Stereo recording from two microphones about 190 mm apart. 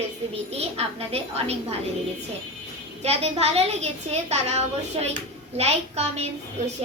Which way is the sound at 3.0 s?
35° right (ahead or behind).